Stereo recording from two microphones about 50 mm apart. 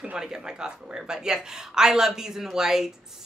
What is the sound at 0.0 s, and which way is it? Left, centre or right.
Speech, centre.